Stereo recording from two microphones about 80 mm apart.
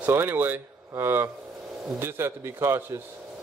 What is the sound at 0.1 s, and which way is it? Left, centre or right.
A man's voice, right.